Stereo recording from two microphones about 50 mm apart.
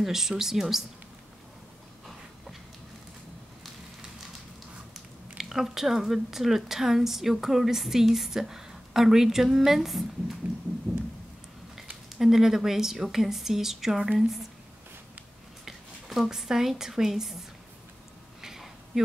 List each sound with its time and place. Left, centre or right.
0.0 s speech: centre
5.4 s speech: centre
10.4 s a sound: right
12.2 s speech: centre
15.6 s a woman's voice: centre
18.4 s a sound: centre